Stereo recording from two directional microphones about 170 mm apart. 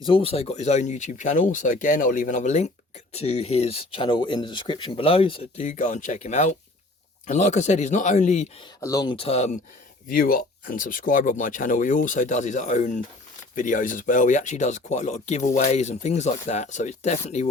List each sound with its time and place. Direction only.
0.0 s speech: 30° left (ahead or behind)
8.8 s speech: 20° left (ahead or behind); by 9.5 s 35° left (ahead or behind)
10.1 s speech: 55° left (ahead or behind)